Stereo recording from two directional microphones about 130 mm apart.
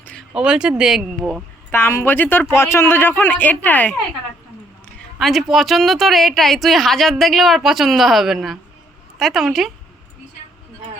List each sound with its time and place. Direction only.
0.0 s a sound: 10° left (ahead or behind)
0.3 s a woman's voice: 5° right (ahead or behind)
1.7 s a man's voice: 20° left (ahead or behind)
4.9 s a woman's voice: centre (ahead or behind)